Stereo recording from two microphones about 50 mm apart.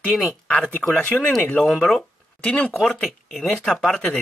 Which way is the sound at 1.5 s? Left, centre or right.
Centre.